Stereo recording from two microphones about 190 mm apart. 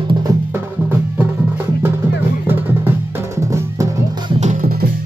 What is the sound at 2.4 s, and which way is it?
Music, 10° right (ahead or behind).